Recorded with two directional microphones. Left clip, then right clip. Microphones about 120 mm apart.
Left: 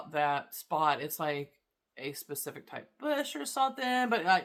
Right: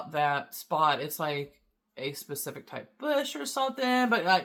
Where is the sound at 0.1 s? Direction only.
25° left (ahead or behind).